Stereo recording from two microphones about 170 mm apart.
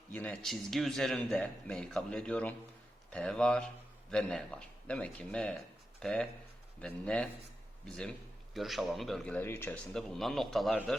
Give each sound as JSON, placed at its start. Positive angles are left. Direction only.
{"t": 0.1, "sound": "a man's voice", "side_deg": 5}
{"t": 9.9, "sound": "a man's voice", "side_deg": 0}